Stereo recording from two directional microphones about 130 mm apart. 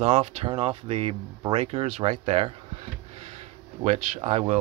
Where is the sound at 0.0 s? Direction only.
55° right (ahead or behind).